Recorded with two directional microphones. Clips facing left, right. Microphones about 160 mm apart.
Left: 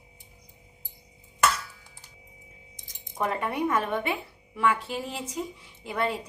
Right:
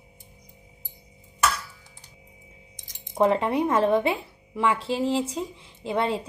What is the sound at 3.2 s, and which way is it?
Speech, 25° right (ahead or behind).